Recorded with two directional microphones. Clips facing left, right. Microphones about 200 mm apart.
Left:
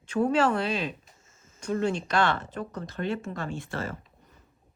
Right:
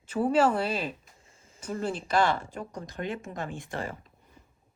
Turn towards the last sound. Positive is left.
turn(degrees=-15)  # may be behind; listen again after turning